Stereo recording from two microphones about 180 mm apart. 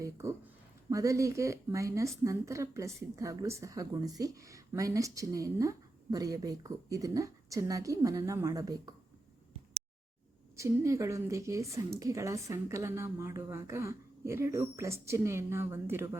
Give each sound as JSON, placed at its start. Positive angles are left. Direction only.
{"t": 0.0, "sound": "a woman's voice", "side_deg": -15}
{"t": 10.6, "sound": "a woman's voice", "side_deg": -15}